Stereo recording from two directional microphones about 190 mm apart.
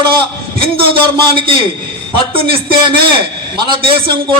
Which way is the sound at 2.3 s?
30° right (ahead or behind).